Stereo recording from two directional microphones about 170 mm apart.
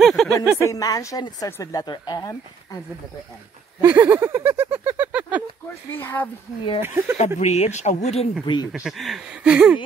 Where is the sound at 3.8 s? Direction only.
10° right (ahead or behind).